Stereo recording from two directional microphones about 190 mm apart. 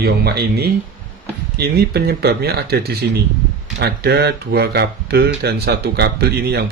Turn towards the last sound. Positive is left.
turn(degrees=-55)  # may be behind; listen again after turning